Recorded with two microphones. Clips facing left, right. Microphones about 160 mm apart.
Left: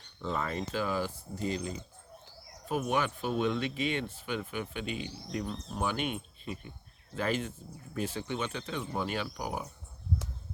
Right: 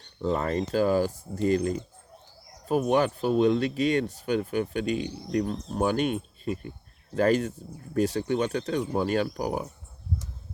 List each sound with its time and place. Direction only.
0.2 s speech: 40° right (ahead or behind)
2.6 s speech: 40° right (ahead or behind)